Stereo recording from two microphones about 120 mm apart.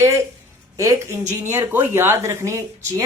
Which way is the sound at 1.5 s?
20° right (ahead or behind).